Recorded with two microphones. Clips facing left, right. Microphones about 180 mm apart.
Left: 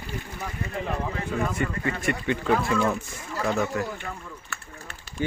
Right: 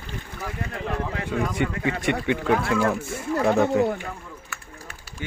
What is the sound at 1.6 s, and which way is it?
Speech, 90° right.